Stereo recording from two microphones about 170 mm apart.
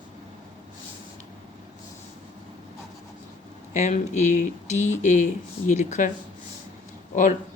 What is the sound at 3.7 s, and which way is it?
Speech, 45° left (ahead or behind).